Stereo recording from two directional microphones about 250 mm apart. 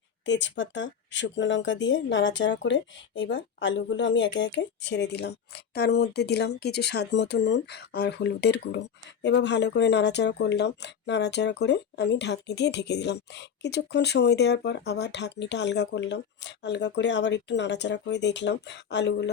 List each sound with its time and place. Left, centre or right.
0.3 s speech: left